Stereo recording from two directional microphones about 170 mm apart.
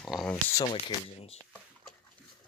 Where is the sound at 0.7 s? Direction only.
35° left (ahead or behind).